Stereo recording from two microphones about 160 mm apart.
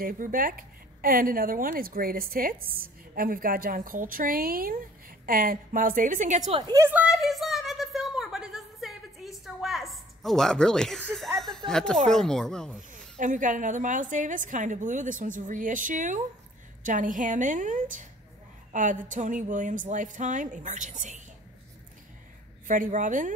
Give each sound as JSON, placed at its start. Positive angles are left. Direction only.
{"t": 0.0, "sound": "a woman's voice", "side_deg": -60}
{"t": 6.7, "sound": "a sound", "side_deg": -15}
{"t": 12.1, "sound": "speech", "side_deg": 5}
{"t": 12.9, "sound": "a woman's voice", "side_deg": -55}
{"t": 22.7, "sound": "a woman's voice", "side_deg": -55}